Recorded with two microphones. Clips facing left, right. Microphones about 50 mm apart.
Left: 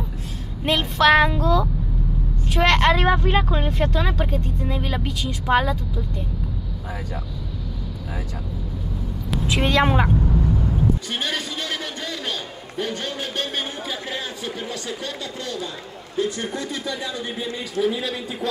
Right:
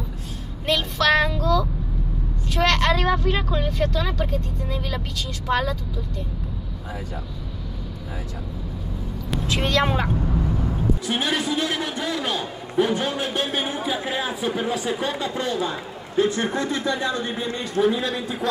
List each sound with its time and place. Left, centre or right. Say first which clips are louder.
0.7 s speech: left 3 dB; left
2.4 s vehicle: left 3 dB; left
3.3 s speech: left 2 dB; left
9.3 s a sound: left 2 dB; centre
9.7 s a woman's voice: left 3 dB; centre
10.2 s a man's voice: left 2 dB; centre; by 17.2 s right
17.8 s a man's voice: right 2 dB; right